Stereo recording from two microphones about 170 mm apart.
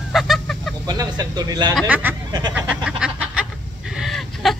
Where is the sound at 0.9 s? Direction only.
25° right (ahead or behind).